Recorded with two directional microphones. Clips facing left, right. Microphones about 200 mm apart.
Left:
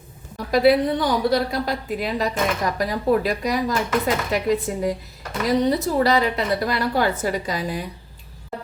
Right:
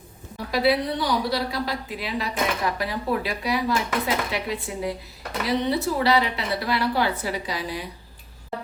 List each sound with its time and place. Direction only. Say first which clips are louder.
0.5 s a woman's voice: left 5 dB; 50° left (ahead or behind)